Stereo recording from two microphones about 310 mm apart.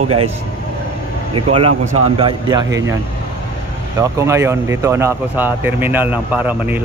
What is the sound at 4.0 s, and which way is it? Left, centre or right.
Speech, centre.